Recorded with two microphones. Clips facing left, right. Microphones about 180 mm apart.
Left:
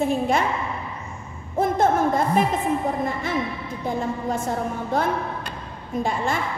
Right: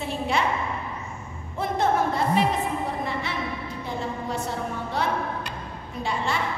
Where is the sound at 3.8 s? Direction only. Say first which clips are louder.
Left 6 dB; 50° left (ahead or behind).